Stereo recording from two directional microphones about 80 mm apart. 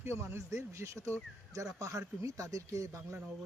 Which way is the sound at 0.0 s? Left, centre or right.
Right.